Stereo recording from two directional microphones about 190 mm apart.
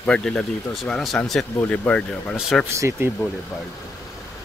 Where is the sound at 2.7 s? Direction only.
15° right (ahead or behind).